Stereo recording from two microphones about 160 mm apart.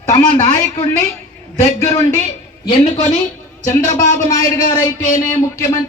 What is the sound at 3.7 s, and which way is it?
A man's voice, 20° left (ahead or behind).